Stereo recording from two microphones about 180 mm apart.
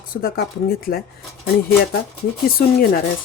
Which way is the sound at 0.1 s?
55° left (ahead or behind).